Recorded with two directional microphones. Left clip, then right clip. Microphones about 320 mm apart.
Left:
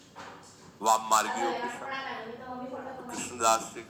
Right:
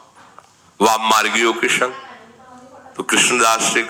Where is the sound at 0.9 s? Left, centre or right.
Right.